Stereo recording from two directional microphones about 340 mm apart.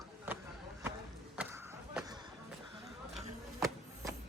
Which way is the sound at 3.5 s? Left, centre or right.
Centre.